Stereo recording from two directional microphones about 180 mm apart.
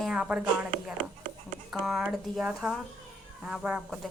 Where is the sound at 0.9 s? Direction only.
50° right (ahead or behind).